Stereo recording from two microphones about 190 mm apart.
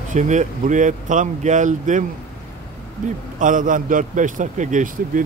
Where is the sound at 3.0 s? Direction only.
45° right (ahead or behind).